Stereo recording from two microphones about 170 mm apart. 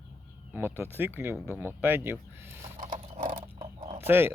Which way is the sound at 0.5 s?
10° right (ahead or behind).